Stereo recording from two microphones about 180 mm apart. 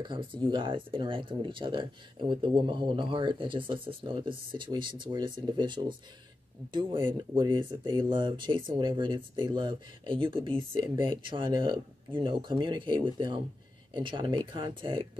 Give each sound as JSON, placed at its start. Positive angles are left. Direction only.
{"t": 0.0, "sound": "speech", "side_deg": -25}